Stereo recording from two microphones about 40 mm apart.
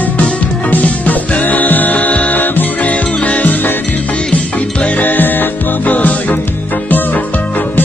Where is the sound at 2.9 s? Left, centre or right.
Left.